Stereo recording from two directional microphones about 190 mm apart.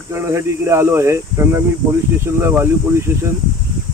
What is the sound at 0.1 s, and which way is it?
Speech, 15° right (ahead or behind).